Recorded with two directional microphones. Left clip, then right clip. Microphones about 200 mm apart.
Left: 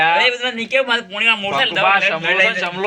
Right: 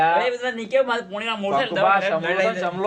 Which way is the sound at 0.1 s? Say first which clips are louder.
Left 5 dB; 15° right (ahead or behind).